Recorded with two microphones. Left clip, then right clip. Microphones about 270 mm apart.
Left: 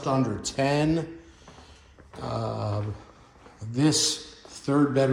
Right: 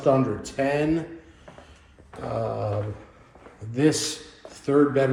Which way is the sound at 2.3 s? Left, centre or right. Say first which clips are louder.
Right 4 dB; centre.